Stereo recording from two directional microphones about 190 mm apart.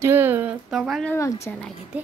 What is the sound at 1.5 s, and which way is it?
Speech, 10° left (ahead or behind).